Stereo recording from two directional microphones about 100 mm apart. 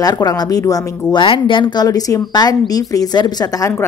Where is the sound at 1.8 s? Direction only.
35° left (ahead or behind).